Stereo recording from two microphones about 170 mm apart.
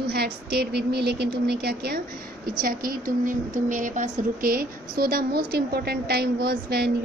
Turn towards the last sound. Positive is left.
turn(degrees=-70)  # may be behind; listen again after turning